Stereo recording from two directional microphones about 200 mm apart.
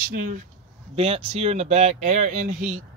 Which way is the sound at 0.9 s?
30° right (ahead or behind).